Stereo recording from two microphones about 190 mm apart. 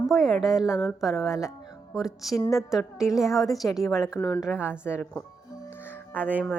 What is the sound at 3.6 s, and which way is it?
Speech, 15° left (ahead or behind).